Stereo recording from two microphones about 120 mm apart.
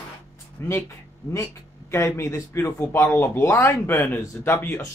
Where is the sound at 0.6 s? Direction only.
20° left (ahead or behind).